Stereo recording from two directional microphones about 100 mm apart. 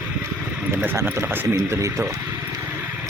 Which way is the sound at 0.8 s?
25° right (ahead or behind).